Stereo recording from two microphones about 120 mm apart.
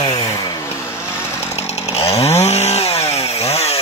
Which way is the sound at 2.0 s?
60° left (ahead or behind).